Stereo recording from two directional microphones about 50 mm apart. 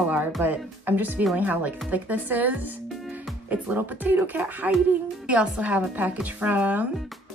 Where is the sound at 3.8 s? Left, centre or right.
Right.